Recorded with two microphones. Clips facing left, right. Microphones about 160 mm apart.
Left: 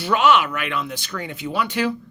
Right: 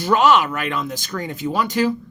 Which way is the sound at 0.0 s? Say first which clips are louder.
Right 2 dB; 40° right (ahead or behind).